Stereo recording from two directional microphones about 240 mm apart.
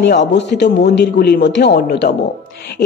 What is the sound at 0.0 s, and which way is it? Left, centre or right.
Speech, left.